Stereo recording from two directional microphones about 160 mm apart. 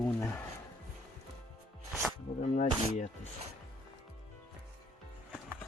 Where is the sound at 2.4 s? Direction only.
45° left (ahead or behind).